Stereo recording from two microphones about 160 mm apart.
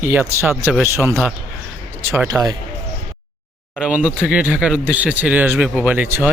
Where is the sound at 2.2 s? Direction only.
20° right (ahead or behind).